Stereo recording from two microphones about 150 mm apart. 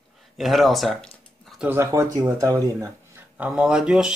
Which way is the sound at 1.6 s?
15° right (ahead or behind).